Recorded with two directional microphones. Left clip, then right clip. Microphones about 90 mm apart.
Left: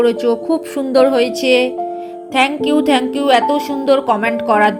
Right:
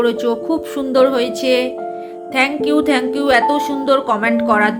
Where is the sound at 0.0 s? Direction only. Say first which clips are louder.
Left 2 dB; 30° left (ahead or behind).